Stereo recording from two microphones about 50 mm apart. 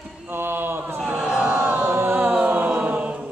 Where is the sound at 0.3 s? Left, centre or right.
Right.